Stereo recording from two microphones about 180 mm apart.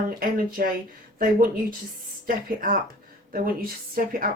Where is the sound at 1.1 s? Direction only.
50° right (ahead or behind).